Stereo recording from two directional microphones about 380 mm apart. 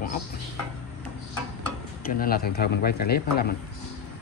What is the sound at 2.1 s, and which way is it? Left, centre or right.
Speech, left.